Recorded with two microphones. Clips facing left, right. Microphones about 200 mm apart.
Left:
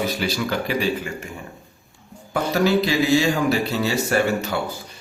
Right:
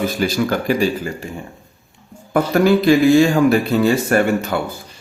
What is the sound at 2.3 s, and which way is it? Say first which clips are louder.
Speech: right 5 dB; 55° right (ahead or behind).